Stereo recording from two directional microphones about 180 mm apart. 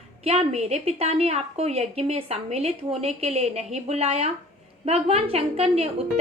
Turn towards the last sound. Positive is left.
turn(degrees=-35)  # may be behind; listen again after turning